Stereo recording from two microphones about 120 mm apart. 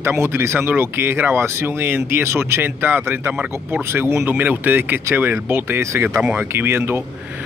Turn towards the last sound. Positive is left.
turn(degrees=-20)  # may be behind; listen again after turning